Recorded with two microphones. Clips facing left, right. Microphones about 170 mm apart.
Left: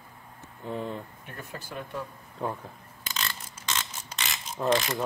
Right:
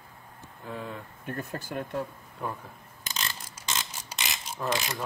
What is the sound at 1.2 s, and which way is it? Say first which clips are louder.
Speech: right 6 dB; 50° right (ahead or behind).